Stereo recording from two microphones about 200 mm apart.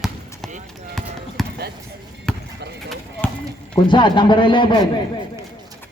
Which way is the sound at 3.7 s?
25° left (ahead or behind).